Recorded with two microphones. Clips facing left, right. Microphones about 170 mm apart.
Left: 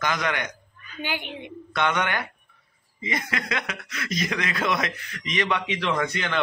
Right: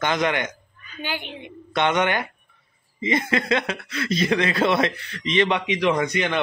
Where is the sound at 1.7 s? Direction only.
20° right (ahead or behind).